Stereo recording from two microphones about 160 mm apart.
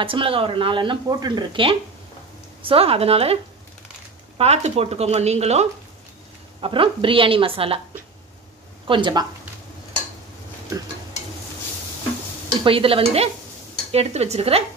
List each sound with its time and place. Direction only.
0.0 s speech: 35° right (ahead or behind)
4.4 s speech: 40° right (ahead or behind)
6.6 s speech: 30° right (ahead or behind)
8.8 s speech: 30° right (ahead or behind)
12.6 s speech: 35° right (ahead or behind)